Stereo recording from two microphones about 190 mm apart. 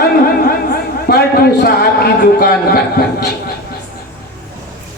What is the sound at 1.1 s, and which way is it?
A man's voice, 55° left (ahead or behind).